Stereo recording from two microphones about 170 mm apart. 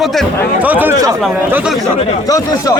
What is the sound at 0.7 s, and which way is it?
A man's voice, 10° right (ahead or behind).